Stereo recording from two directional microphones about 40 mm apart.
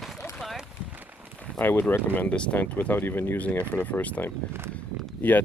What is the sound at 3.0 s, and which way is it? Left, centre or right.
Speech, left.